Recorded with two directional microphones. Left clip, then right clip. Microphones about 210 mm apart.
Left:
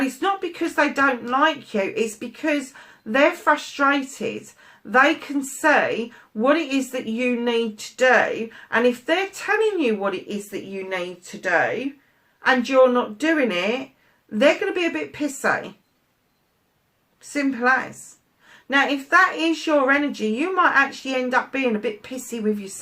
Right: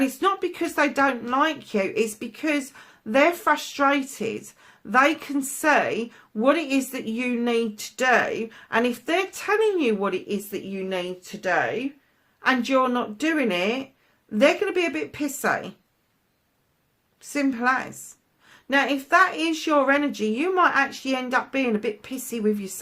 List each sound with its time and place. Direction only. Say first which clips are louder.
0.2 s a sound: even; 45° right (ahead or behind)
1.3 s a woman's voice: left 3 dB; 40° right (ahead or behind)
12.4 s a woman's voice: left 5 dB; 40° right (ahead or behind)
17.2 s a woman's voice: left 1 dB; 45° right (ahead or behind)